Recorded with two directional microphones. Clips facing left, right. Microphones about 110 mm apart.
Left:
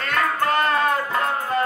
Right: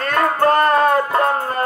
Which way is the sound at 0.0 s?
40° right (ahead or behind).